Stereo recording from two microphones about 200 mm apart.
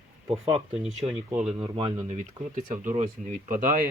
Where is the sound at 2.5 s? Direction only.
40° right (ahead or behind).